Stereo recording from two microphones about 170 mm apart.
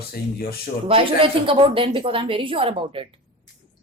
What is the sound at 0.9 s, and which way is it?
A woman's voice, 30° right (ahead or behind).